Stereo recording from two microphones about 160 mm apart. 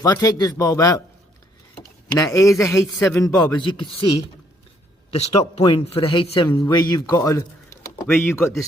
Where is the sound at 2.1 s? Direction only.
20° left (ahead or behind).